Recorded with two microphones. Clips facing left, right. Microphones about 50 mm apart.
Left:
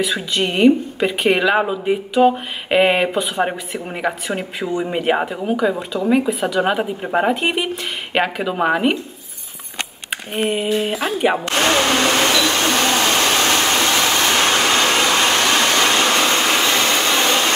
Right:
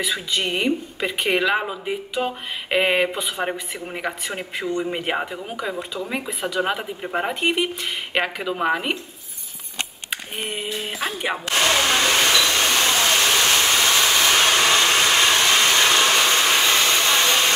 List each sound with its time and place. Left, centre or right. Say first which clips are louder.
0.0 s speech: left 4 dB; centre
10.3 s speech: left 11 dB; centre
11.4 s a sound: left 3 dB; left